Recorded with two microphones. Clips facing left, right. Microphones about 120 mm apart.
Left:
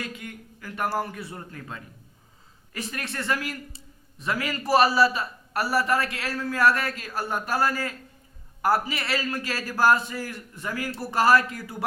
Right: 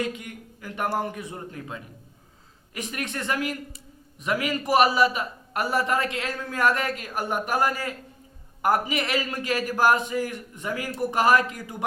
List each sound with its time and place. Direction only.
0.0 s a man's voice: 20° right (ahead or behind)